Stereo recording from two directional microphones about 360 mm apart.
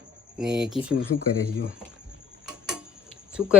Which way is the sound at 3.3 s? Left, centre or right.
Centre.